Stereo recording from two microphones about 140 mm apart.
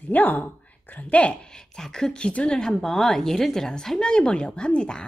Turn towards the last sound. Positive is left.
turn(degrees=5)  # may be behind; listen again after turning